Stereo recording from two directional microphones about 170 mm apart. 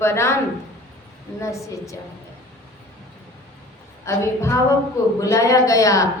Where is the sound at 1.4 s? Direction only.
20° left (ahead or behind).